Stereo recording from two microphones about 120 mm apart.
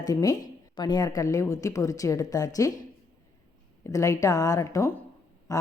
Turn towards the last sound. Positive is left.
turn(degrees=30)  # may be behind; listen again after turning